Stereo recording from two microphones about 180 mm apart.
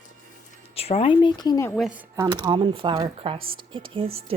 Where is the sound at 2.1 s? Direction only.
25° right (ahead or behind).